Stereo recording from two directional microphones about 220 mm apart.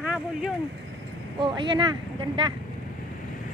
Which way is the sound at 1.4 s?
20° right (ahead or behind).